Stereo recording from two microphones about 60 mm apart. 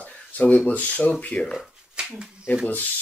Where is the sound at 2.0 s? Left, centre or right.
Centre.